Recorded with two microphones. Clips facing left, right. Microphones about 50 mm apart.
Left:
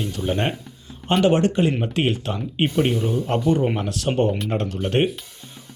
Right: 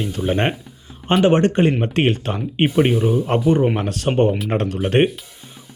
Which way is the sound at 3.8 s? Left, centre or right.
Right.